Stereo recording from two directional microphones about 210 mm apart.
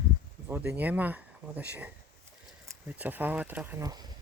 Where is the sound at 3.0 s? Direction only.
10° right (ahead or behind).